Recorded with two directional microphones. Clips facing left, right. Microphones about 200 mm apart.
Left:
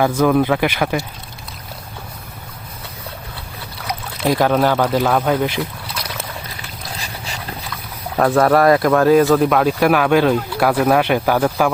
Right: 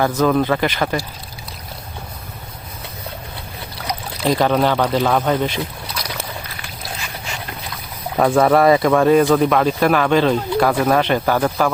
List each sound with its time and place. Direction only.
0.0 s speech: 10° left (ahead or behind)
3.8 s speech: 5° left (ahead or behind)
6.9 s boat: 35° left (ahead or behind)
8.2 s speech: 5° right (ahead or behind)